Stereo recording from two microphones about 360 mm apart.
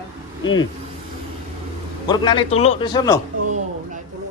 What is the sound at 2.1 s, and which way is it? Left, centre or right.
Speech, centre.